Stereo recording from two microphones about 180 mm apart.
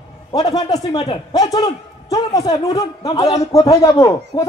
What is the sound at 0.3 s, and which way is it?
A man's voice, 20° left (ahead or behind).